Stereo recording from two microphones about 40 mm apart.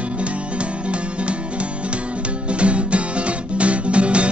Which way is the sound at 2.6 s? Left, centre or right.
Right.